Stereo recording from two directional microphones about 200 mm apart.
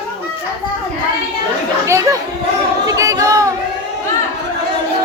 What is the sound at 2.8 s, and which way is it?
Chatter, 15° right (ahead or behind).